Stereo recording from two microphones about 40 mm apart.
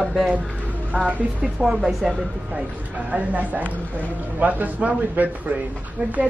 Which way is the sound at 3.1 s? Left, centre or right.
Right.